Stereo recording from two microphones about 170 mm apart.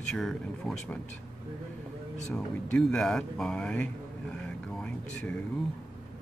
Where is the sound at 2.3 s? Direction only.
5° left (ahead or behind).